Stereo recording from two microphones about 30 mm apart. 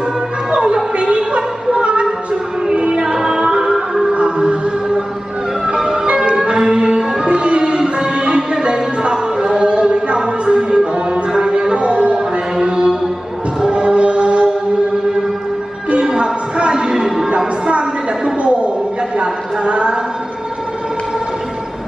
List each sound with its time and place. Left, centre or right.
0.5 s music: right
1.1 s a sound: right
2.7 s music: right
3.3 s music: right
4.1 s music: right
5.7 s music: right
6.1 s music: right
9.6 s music: right
12.5 s music: right
16.2 s a sound: right
16.7 s music: right
17.6 s a sound: right